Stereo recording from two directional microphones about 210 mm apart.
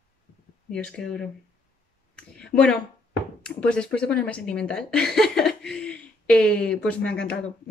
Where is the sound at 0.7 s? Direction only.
5° left (ahead or behind).